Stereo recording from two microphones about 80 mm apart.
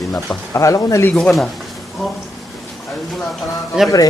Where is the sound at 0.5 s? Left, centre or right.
Left.